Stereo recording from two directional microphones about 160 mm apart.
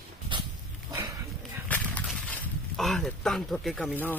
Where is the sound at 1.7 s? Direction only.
10° left (ahead or behind).